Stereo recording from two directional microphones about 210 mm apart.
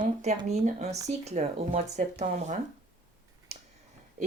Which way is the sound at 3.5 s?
30° right (ahead or behind).